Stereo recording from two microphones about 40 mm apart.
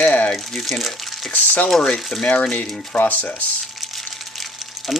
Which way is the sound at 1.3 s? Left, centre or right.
Left.